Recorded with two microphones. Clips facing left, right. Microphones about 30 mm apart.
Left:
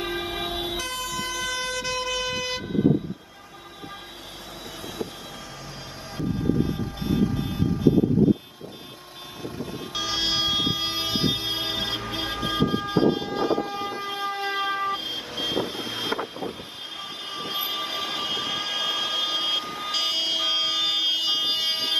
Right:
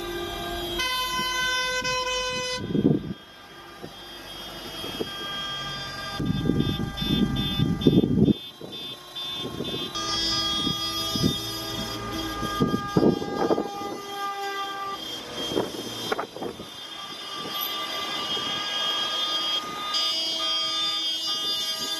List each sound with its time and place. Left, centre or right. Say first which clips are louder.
0.0 s vehicle: left 3 dB; left
0.7 s vehicle: right 3 dB; right; by 2.6 s centre
6.6 s vehicle: even; right
9.4 s vehicle: even; right
9.9 s vehicle: left 4 dB; centre; by 16.2 s left
17.4 s vehicle: left 2 dB; centre